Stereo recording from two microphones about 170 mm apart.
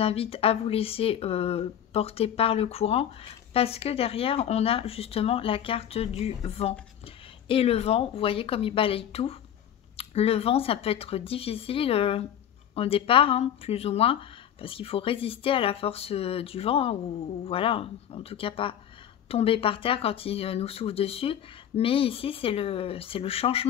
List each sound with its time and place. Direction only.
0.0 s speech: 35° left (ahead or behind)